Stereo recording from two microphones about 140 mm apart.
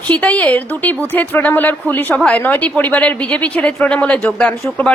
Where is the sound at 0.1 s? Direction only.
10° left (ahead or behind).